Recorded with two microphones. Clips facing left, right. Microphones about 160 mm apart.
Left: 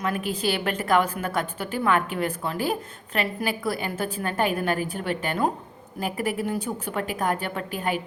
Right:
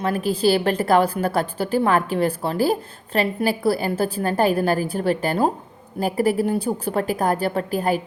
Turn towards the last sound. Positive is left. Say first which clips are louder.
# right 6 dB
turn(degrees=-40)  # may be behind; listen again after turning